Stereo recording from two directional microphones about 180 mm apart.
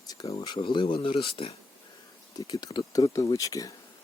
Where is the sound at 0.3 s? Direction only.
30° left (ahead or behind).